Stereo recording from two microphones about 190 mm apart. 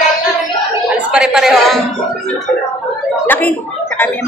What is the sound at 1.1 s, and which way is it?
Speech, 5° right (ahead or behind).